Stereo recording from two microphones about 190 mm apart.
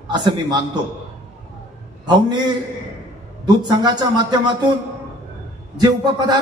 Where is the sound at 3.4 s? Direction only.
20° right (ahead or behind).